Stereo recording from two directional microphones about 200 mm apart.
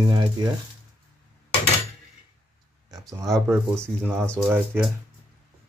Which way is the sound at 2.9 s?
15° right (ahead or behind).